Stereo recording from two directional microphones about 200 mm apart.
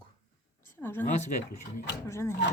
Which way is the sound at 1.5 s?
55° left (ahead or behind).